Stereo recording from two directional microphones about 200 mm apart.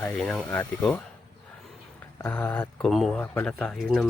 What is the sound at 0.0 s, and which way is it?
Speech, 5° left (ahead or behind).